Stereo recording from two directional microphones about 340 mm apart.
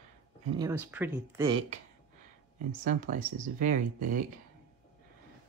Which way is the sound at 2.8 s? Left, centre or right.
Right.